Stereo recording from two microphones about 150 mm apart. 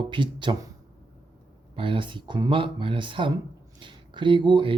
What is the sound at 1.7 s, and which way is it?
Speech, 35° right (ahead or behind).